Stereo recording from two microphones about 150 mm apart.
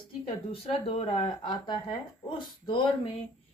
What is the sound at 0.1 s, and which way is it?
A woman's voice, 35° left (ahead or behind).